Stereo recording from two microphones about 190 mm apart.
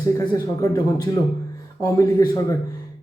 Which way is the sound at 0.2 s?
15° left (ahead or behind).